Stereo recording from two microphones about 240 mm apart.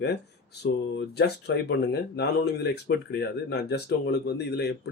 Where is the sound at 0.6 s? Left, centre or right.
Left.